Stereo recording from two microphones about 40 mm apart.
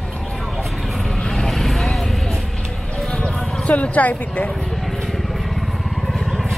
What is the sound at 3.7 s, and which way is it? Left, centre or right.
Speech, left.